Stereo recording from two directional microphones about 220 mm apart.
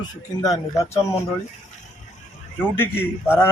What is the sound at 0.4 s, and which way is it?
Speech, 15° left (ahead or behind).